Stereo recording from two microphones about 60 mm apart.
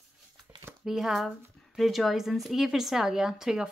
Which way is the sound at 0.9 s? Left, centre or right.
Centre.